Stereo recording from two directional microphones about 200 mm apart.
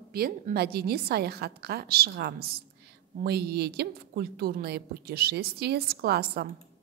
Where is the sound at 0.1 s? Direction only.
50° right (ahead or behind).